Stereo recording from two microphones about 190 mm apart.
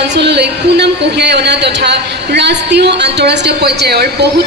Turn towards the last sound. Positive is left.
turn(degrees=-60)  # may be behind; listen again after turning